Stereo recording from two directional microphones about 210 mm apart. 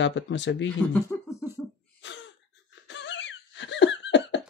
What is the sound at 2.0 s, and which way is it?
Wheeze, 60° left (ahead or behind).